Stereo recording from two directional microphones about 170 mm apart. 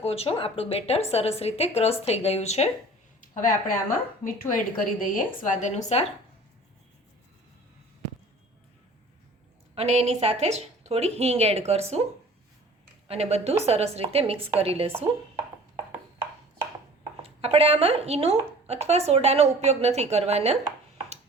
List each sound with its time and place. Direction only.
0.0 s a woman's voice: 35° left (ahead or behind)
3.2 s a woman's voice: 50° left (ahead or behind)
9.7 s a woman's voice: 40° right (ahead or behind)
13.1 s a woman's voice: 35° right (ahead or behind)
17.2 s a woman's voice: 35° right (ahead or behind)